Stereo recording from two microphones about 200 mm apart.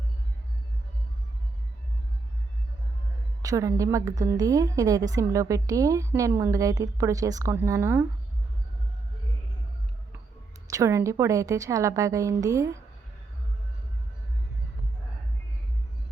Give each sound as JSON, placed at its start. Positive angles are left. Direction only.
{"t": 3.4, "sound": "a woman's voice", "side_deg": -15}
{"t": 10.7, "sound": "a woman's voice", "side_deg": -15}